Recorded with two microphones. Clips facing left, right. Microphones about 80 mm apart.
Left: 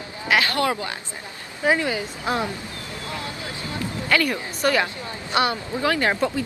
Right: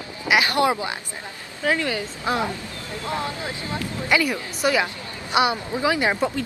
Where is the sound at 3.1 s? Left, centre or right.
Right.